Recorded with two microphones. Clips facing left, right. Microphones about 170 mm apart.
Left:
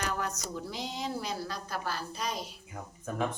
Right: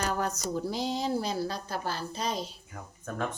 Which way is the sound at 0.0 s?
35° right (ahead or behind).